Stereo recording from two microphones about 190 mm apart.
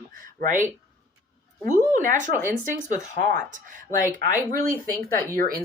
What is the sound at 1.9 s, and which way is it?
Speech, 40° right (ahead or behind).